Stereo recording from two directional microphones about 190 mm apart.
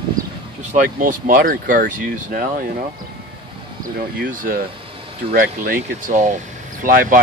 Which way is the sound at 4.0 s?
45° right (ahead or behind).